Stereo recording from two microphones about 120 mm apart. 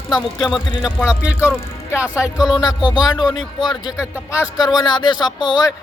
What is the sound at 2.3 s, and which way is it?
Speech, 35° left (ahead or behind).